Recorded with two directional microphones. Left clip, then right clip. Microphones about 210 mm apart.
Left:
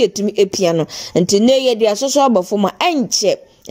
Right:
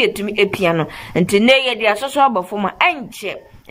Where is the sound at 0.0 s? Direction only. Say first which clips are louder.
Left 2 dB; 35° left (ahead or behind).